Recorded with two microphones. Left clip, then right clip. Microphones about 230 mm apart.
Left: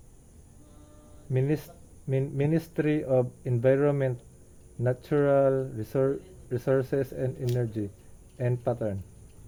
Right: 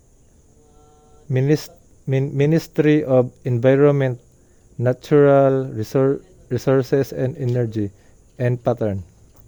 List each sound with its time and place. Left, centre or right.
1.3 s speech: right